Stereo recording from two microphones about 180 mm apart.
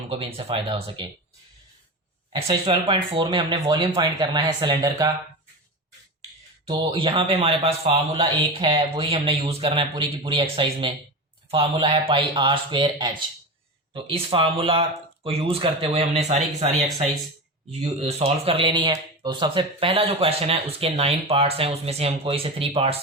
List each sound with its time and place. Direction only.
0.1 s speech: 30° right (ahead or behind)
2.3 s speech: 30° right (ahead or behind)
6.7 s speech: 25° right (ahead or behind)
17.7 s speech: 35° right (ahead or behind)